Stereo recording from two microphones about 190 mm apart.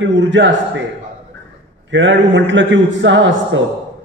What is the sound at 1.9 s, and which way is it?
A man's voice, 75° right (ahead or behind).